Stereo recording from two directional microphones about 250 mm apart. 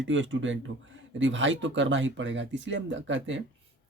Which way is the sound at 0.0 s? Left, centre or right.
Right.